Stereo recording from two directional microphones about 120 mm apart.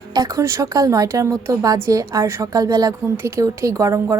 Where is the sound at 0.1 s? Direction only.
30° right (ahead or behind).